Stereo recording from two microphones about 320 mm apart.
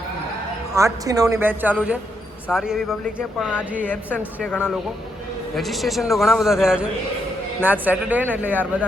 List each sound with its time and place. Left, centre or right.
0.7 s a woman's voice: centre